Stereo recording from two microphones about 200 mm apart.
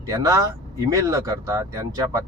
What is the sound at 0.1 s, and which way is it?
Speech, 20° right (ahead or behind).